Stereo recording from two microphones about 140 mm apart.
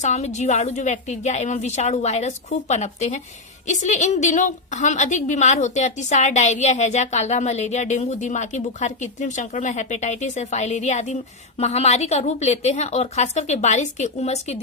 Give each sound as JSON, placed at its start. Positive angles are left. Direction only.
{"t": 0.0, "sound": "a woman's voice", "side_deg": 55}